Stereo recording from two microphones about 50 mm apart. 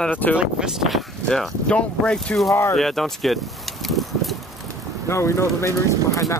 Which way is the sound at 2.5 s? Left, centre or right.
Left.